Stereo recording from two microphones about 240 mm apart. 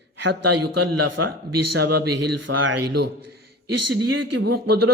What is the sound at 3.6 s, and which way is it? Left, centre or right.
Speech, right.